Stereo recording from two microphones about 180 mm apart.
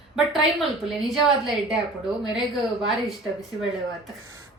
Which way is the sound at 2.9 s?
Centre (ahead or behind).